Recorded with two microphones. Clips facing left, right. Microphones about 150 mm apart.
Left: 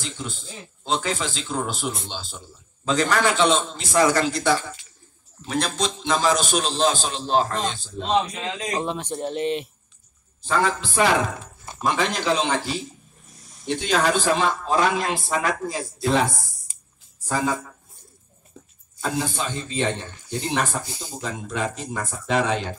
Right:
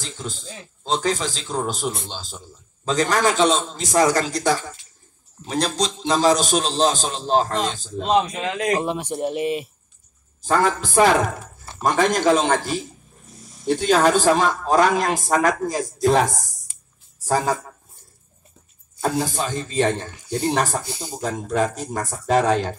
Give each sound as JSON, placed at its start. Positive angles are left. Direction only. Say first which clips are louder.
{"t": 0.8, "sound": "a man's voice", "louder": "right 3 dB", "side_deg": -35}
{"t": 8.7, "sound": "speech", "louder": "right 3 dB", "side_deg": -10}
{"t": 10.4, "sound": "a man's voice", "louder": "right 3 dB", "side_deg": -40}
{"t": 19.1, "sound": "speech", "louder": "right 3 dB", "side_deg": -40}